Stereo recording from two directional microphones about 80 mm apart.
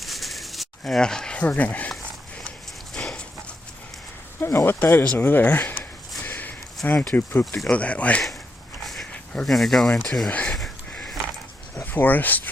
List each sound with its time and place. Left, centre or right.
0.0 s a sound: centre
2.9 s dog: centre
4.4 s speech: left
6.2 s a sound: left
6.9 s speech: centre
7.2 s speech: left
7.7 s speech: centre
8.8 s dog: centre
9.3 s speech: centre
9.9 s speech: centre
11.8 s speech: left